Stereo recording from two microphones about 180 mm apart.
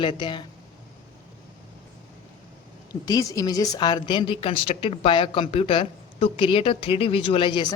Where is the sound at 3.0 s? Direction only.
20° left (ahead or behind).